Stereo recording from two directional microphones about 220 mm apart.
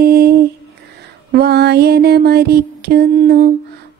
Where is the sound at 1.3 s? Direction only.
45° right (ahead or behind).